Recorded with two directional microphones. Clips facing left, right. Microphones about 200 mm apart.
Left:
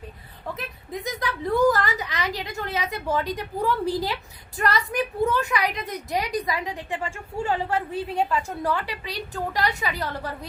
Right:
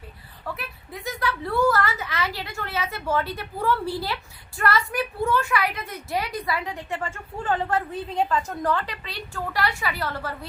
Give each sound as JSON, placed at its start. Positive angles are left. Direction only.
{"t": 0.5, "sound": "a woman's voice", "side_deg": 20}